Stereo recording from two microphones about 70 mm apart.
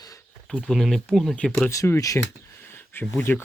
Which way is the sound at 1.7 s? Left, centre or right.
Left.